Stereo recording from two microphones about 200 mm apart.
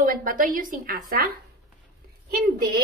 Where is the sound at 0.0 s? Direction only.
45° right (ahead or behind).